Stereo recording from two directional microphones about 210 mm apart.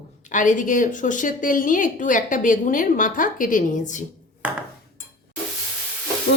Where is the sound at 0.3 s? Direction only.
35° left (ahead or behind).